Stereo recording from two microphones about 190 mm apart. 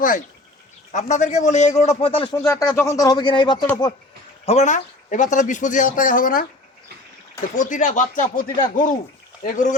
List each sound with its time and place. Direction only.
0.9 s speech: 40° left (ahead or behind)
2.3 s speech: 20° left (ahead or behind)
4.4 s speech: 35° left (ahead or behind)
7.5 s speech: 40° left (ahead or behind)